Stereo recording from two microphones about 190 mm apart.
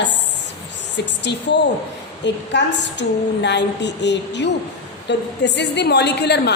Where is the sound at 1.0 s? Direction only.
65° left (ahead or behind).